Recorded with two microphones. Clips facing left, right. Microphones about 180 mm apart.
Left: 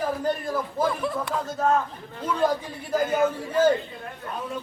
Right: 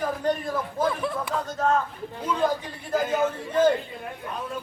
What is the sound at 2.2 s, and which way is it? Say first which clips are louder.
Speech: even; 10° right (ahead or behind).